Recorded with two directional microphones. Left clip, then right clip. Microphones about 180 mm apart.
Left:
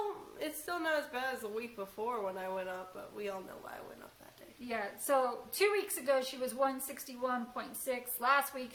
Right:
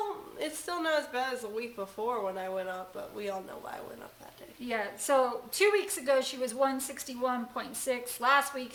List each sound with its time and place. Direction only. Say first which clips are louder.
0.3 s speech: right 5 dB; 5° right (ahead or behind)
4.6 s a woman's voice: right 5 dB; 25° right (ahead or behind)